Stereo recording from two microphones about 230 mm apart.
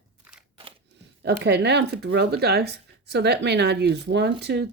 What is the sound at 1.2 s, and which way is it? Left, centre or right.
Speech, right.